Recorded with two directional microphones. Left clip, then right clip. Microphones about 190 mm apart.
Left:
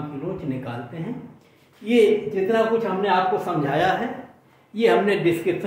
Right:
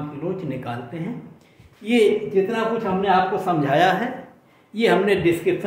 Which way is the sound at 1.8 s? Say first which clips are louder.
Even; 25° right (ahead or behind).